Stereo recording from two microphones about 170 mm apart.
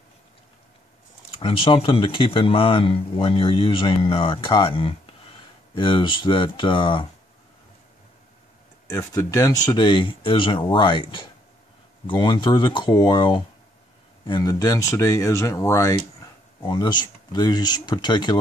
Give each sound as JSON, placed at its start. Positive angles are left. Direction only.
{"t": 1.3, "sound": "speech", "side_deg": 30}
{"t": 8.8, "sound": "speech", "side_deg": 20}